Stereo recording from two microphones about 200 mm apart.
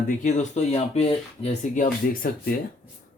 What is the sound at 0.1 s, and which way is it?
Speech, 35° left (ahead or behind).